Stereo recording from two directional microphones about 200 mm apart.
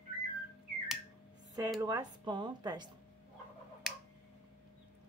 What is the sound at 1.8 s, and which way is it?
Speech, 20° right (ahead or behind).